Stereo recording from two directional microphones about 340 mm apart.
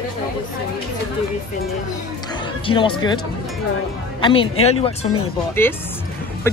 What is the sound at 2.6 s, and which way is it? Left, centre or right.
Speech, centre.